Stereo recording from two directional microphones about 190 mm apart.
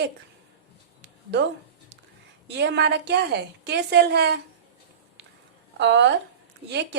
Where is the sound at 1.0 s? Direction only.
65° right (ahead or behind).